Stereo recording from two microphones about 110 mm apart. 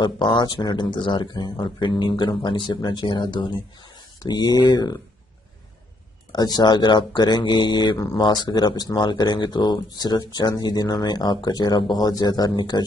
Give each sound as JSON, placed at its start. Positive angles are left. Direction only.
{"t": 0.0, "sound": "speech", "side_deg": 45}
{"t": 6.3, "sound": "speech", "side_deg": 35}